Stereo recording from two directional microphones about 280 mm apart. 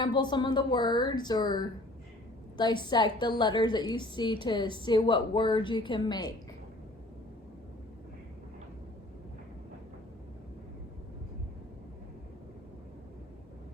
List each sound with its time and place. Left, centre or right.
0.0 s a woman's voice: centre